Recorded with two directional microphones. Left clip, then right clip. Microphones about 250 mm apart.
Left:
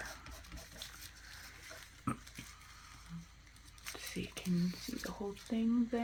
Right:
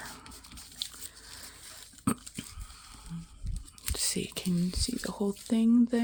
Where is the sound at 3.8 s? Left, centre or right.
Right.